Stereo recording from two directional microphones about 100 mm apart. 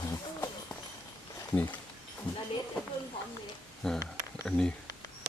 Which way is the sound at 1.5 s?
15° left (ahead or behind).